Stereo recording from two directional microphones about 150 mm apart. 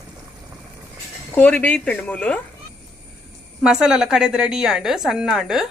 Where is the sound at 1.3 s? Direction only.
10° left (ahead or behind).